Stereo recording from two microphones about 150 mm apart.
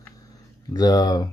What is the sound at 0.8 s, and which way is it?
Speech, 25° left (ahead or behind).